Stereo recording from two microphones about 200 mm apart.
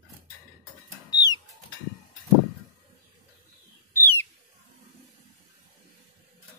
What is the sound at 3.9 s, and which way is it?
Bird, 10° left (ahead or behind).